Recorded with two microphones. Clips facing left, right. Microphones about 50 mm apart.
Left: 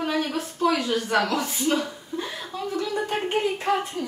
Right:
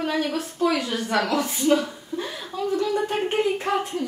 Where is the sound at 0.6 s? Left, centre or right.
Centre.